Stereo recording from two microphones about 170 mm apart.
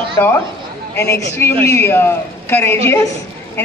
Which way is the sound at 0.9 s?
15° left (ahead or behind).